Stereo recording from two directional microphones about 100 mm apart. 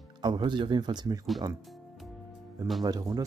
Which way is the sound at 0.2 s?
50° right (ahead or behind).